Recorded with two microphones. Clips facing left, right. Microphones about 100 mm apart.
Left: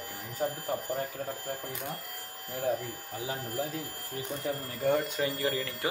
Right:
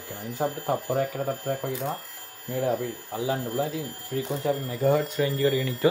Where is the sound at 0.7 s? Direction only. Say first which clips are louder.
Right 7 dB; 90° right; by 2.0 s 70° right (ahead or behind).